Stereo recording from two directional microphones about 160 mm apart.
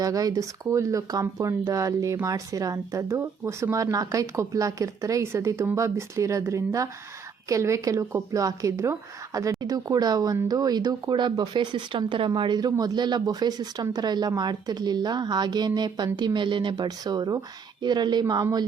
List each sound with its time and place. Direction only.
0.0 s a woman's voice: 20° right (ahead or behind)